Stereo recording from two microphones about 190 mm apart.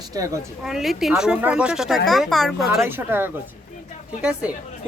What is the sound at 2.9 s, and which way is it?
Speech, 10° right (ahead or behind).